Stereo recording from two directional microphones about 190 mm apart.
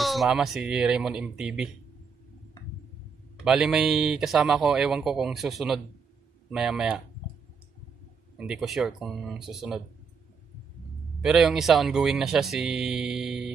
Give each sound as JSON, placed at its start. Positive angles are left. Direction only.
{"t": 0.0, "sound": "speech", "side_deg": 0}
{"t": 3.4, "sound": "speech", "side_deg": -5}
{"t": 8.4, "sound": "speech", "side_deg": -5}
{"t": 11.1, "sound": "speech", "side_deg": 0}